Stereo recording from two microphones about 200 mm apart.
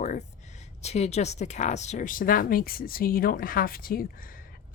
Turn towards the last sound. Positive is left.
turn(degrees=45)  # may be behind; listen again after turning